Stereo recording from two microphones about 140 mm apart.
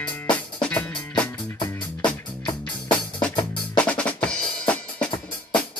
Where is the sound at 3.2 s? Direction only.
10° left (ahead or behind).